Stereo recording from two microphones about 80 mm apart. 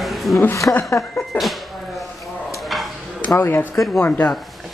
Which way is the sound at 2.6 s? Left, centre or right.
Centre.